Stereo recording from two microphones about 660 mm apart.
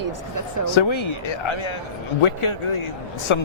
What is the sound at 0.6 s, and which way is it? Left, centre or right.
Speech, left.